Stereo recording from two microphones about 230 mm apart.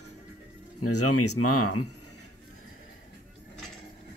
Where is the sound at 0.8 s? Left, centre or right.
Left.